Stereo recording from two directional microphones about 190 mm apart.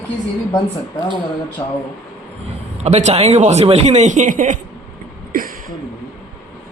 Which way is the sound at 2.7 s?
35° right (ahead or behind).